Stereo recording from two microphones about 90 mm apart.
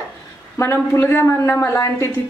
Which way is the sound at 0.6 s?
35° left (ahead or behind).